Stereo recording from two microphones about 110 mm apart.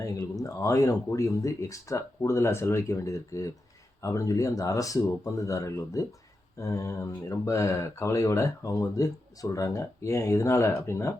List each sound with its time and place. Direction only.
0.0 s speech: 30° left (ahead or behind)